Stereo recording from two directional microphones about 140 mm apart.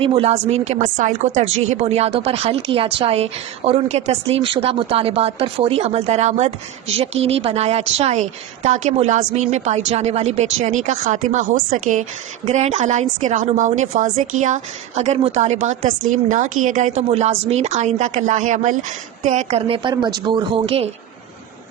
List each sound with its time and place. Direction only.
0.0 s a woman's voice: 45° right (ahead or behind)